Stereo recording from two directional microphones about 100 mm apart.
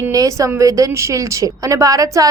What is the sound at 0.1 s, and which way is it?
A woman's voice, 35° right (ahead or behind).